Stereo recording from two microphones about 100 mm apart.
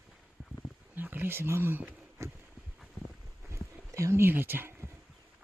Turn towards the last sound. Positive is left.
turn(degrees=-20)  # may be behind; listen again after turning